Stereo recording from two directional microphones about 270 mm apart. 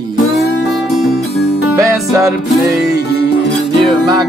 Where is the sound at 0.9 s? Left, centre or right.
Centre.